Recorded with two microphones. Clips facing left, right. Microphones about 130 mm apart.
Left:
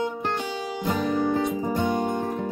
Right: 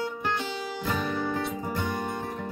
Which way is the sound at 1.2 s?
20° left (ahead or behind).